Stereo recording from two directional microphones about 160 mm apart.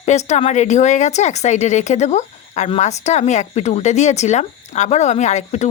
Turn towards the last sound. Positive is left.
turn(degrees=45)  # may be behind; listen again after turning